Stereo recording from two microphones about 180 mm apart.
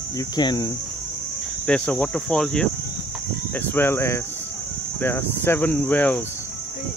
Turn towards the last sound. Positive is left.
turn(degrees=10)  # may be behind; listen again after turning